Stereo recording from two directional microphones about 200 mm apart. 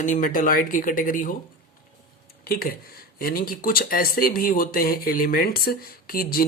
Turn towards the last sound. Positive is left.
turn(degrees=45)  # may be behind; listen again after turning